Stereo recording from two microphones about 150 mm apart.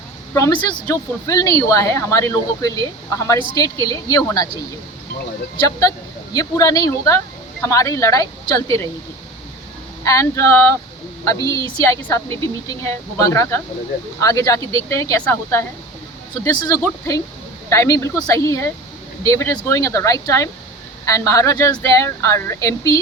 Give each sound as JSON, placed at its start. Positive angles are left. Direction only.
{"t": 0.9, "sound": "a woman's voice", "side_deg": 25}
{"t": 5.5, "sound": "a woman's voice", "side_deg": 25}
{"t": 10.0, "sound": "a woman's voice", "side_deg": 20}